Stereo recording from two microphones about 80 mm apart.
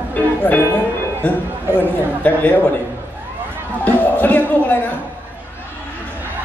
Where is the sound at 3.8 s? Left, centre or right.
Left.